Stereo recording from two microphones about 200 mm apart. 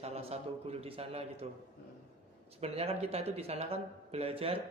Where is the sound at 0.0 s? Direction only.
30° right (ahead or behind).